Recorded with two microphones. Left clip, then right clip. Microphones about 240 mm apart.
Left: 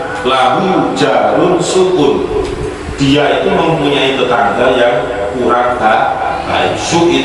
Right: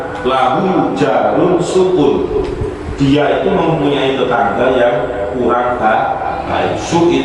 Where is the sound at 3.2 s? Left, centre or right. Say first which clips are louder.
Left 2 dB; centre.